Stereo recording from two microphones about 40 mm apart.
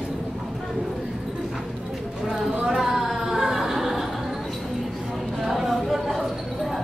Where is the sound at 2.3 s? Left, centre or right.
Centre.